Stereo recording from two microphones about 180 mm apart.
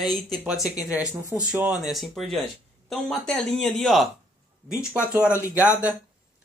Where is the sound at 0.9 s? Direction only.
5° right (ahead or behind).